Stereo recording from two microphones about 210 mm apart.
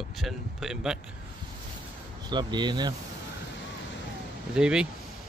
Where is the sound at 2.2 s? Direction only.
20° right (ahead or behind).